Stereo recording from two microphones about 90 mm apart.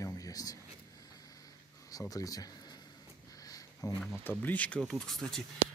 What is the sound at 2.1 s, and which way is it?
Speech, 40° left (ahead or behind).